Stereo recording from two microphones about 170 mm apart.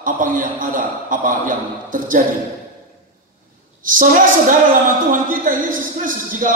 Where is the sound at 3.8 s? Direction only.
50° right (ahead or behind).